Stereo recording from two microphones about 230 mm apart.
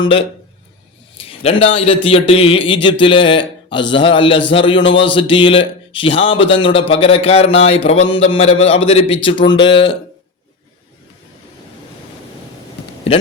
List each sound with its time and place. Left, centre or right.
0.0 s a man's voice: left
13.1 s speech: left